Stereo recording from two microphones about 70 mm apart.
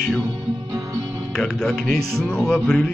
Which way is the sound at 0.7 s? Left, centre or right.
Right.